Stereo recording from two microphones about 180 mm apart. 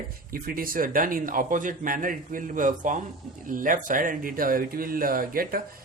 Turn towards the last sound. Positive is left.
turn(degrees=-55)  # may be behind; listen again after turning